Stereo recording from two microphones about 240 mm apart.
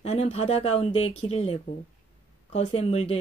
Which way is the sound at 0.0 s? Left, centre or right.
Left.